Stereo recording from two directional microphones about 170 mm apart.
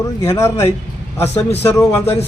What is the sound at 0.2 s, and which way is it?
Speech, 15° left (ahead or behind).